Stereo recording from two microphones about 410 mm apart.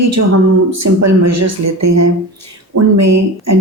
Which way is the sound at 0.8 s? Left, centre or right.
Right.